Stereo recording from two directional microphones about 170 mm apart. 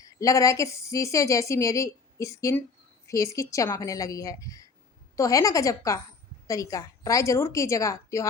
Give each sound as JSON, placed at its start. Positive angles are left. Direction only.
{"t": 0.0, "sound": "a woman's voice", "side_deg": 20}